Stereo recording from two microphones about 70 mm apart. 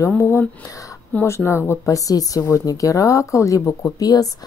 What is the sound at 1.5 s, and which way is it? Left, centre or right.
Speech, left.